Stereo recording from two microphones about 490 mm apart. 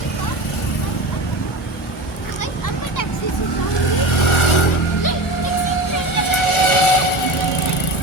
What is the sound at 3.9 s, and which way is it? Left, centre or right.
Vehicle, left.